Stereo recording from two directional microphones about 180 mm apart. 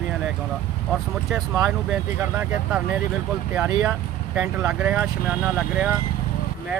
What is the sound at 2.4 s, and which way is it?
Speech, 10° right (ahead or behind).